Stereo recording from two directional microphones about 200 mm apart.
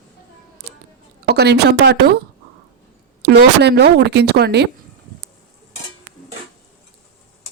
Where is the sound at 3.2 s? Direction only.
55° right (ahead or behind).